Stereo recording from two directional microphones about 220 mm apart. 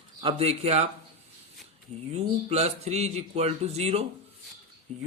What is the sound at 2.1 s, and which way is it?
Speech, 30° right (ahead or behind).